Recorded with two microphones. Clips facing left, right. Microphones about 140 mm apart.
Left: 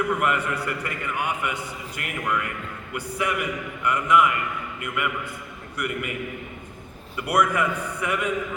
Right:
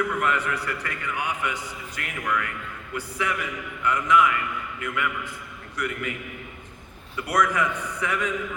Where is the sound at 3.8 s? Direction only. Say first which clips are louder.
Left 1 dB; 10° left (ahead or behind).